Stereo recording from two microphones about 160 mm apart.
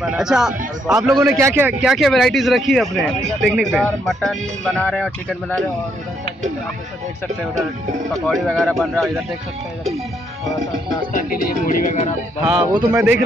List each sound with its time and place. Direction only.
0.0 s speech: 5° right (ahead or behind)
1.2 s speech: 15° right (ahead or behind); by 5.7 s centre (ahead or behind)
8.1 s speech: centre (ahead or behind)
11.1 s speech: 55° left (ahead or behind)
12.5 s a man's voice: 25° right (ahead or behind)